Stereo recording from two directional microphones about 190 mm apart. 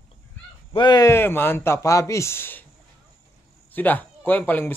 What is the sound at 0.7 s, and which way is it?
Speech, 20° left (ahead or behind).